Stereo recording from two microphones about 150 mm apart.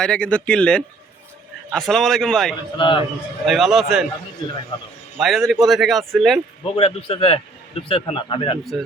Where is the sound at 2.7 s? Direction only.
35° left (ahead or behind).